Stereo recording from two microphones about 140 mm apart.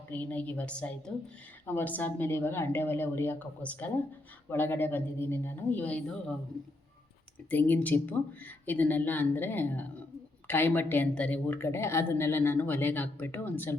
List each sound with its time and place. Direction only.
0.1 s a woman's voice: 10° left (ahead or behind)
7.5 s a woman's voice: 15° left (ahead or behind)